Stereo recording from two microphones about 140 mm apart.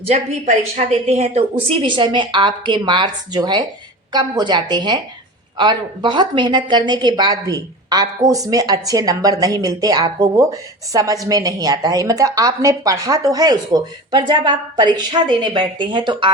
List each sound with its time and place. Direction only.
0.0 s speech: 50° right (ahead or behind); by 16.3 s 35° right (ahead or behind)